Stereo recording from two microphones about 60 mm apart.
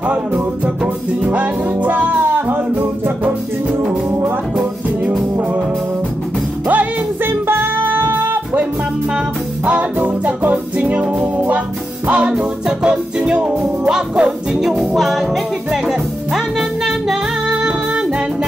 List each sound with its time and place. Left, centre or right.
1.2 s music: right
6.7 s music: right
9.7 s music: right; by 14.7 s centre
15.0 s music: centre
17.6 s music: centre